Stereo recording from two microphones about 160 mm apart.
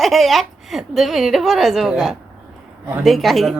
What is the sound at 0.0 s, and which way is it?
A woman's voice, centre (ahead or behind).